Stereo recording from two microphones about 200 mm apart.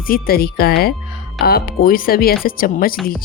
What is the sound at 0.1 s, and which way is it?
Speech, 50° left (ahead or behind).